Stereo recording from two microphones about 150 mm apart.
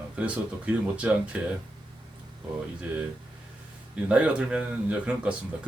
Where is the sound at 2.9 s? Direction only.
10° right (ahead or behind).